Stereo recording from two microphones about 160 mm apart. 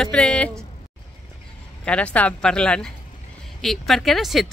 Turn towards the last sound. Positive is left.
turn(degrees=0)  # may be behind; listen again after turning